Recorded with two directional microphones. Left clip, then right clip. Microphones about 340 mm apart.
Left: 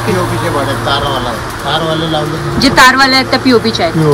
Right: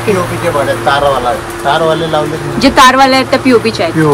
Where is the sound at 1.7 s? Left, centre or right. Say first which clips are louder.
Right 4 dB; right.